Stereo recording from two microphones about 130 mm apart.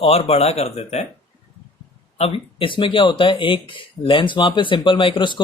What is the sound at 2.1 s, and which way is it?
Speech, 50° left (ahead or behind).